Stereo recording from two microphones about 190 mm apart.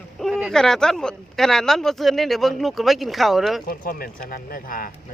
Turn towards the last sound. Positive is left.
turn(degrees=50)  # may be behind; listen again after turning